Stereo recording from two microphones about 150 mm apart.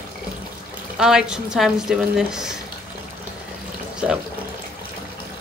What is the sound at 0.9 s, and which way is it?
Speech, 5° right (ahead or behind).